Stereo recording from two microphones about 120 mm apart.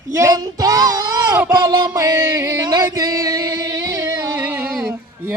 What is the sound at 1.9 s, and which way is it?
Music, 25° right (ahead or behind).